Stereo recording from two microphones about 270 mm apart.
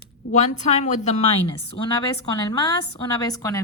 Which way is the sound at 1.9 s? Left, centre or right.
Centre.